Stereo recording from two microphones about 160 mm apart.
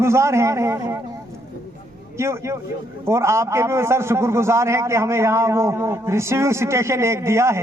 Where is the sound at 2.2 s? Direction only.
15° right (ahead or behind).